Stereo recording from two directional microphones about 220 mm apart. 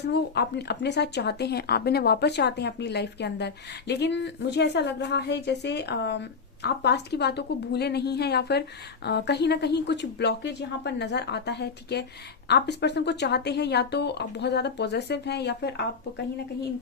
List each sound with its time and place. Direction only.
0.1 s speech: 50° left (ahead or behind)